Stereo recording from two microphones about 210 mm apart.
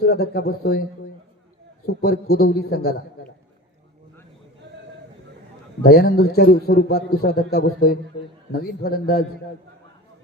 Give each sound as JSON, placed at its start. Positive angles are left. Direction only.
{"t": 0.0, "sound": "a man's voice", "side_deg": 50}
{"t": 2.0, "sound": "a man's voice", "side_deg": 50}
{"t": 5.8, "sound": "a man's voice", "side_deg": 50}